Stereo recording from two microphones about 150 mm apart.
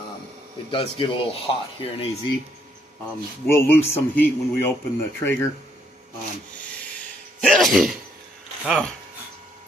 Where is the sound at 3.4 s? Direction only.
15° left (ahead or behind).